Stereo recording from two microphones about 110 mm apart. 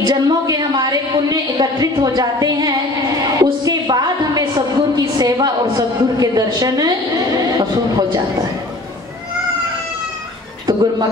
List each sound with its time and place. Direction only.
0.0 s speech: 35° right (ahead or behind)
3.3 s a sound: 35° right (ahead or behind)
10.7 s a man's voice: 40° right (ahead or behind)